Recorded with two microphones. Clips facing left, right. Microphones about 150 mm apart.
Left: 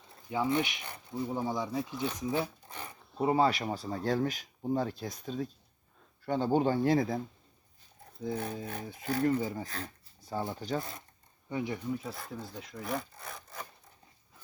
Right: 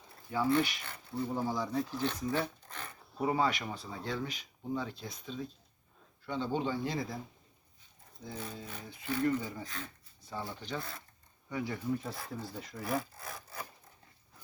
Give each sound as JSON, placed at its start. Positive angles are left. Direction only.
{"t": 0.3, "sound": "speech", "side_deg": 20}
{"t": 1.5, "sound": "wood", "side_deg": 5}
{"t": 2.1, "sound": "speech", "side_deg": 10}
{"t": 3.2, "sound": "speech", "side_deg": 30}
{"t": 8.6, "sound": "speech", "side_deg": 50}
{"t": 10.8, "sound": "speech", "side_deg": 20}
{"t": 11.8, "sound": "wood", "side_deg": 0}